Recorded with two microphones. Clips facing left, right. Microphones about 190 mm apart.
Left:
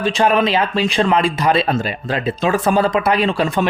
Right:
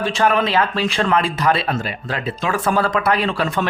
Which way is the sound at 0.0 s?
20° left (ahead or behind).